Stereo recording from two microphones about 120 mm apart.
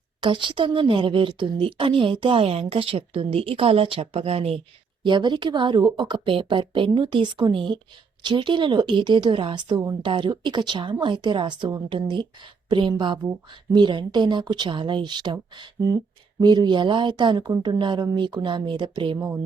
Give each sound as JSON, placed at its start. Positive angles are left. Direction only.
{"t": 0.2, "sound": "a woman's voice", "side_deg": -40}
{"t": 5.0, "sound": "a woman's voice", "side_deg": -40}